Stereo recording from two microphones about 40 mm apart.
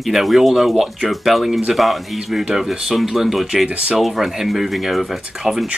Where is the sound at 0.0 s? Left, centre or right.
Centre.